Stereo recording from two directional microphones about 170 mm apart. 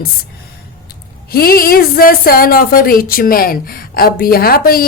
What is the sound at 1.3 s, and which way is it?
A woman's voice, 60° left (ahead or behind).